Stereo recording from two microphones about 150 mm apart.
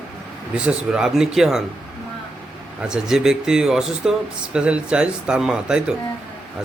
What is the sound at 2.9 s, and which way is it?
Speech, 5° right (ahead or behind).